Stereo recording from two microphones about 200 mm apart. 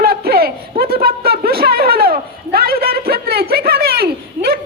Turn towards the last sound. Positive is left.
turn(degrees=-50)  # may be behind; listen again after turning